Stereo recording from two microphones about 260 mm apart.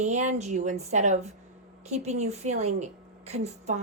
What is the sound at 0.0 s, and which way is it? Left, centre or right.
Speech, right.